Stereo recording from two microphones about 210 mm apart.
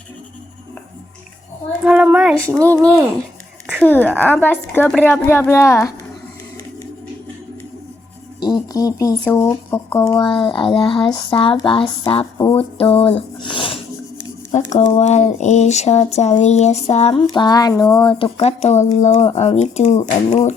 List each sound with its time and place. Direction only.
1.8 s a child's voice: 5° right (ahead or behind)
3.8 s a woman's voice: 10° left (ahead or behind)
8.4 s speech: 20° left (ahead or behind)
14.5 s speech: 35° left (ahead or behind)
17.2 s speech: 20° left (ahead or behind)